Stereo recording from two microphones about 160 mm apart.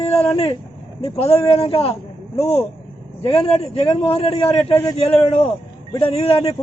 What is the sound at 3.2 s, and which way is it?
A man's voice, 35° left (ahead or behind).